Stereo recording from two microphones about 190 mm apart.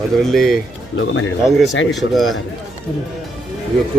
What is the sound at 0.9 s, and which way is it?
Speech, 85° left.